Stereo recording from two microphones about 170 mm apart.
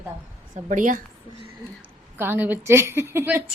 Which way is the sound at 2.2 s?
10° right (ahead or behind).